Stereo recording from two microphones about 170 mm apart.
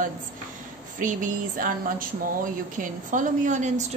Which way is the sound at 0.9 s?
50° right (ahead or behind).